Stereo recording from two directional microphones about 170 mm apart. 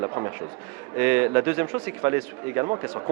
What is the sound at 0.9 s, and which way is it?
A man's voice, 10° right (ahead or behind).